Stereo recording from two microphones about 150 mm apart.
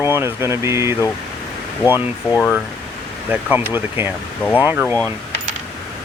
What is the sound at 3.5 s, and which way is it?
Speech, 15° right (ahead or behind).